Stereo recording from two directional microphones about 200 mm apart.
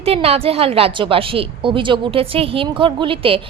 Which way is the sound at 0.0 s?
30° right (ahead or behind).